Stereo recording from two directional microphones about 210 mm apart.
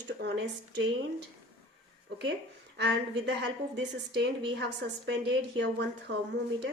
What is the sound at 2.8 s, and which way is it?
A woman's voice, 55° right (ahead or behind).